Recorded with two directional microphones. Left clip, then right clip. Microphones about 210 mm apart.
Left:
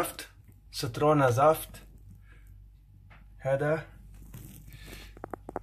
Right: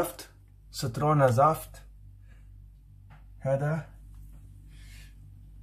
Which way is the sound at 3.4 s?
25° left (ahead or behind).